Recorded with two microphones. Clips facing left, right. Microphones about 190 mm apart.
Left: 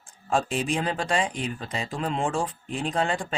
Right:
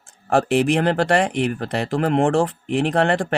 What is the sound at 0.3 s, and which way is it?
Speech, 70° right (ahead or behind).